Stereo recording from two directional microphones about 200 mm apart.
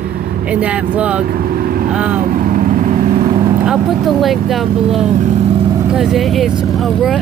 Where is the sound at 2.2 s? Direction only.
45° right (ahead or behind).